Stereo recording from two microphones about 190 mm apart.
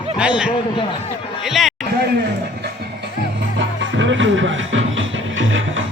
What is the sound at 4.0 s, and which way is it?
Music, 80° right.